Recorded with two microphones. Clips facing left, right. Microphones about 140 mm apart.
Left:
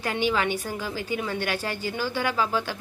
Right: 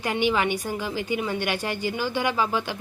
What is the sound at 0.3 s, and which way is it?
Speech, 15° right (ahead or behind).